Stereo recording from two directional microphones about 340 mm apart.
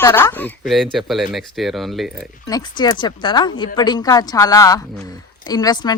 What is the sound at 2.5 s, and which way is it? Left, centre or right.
Speech, centre.